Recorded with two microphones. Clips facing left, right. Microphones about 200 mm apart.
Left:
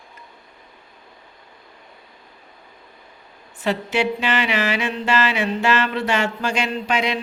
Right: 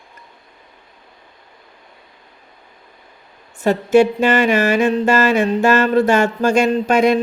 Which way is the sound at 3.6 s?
45° right (ahead or behind).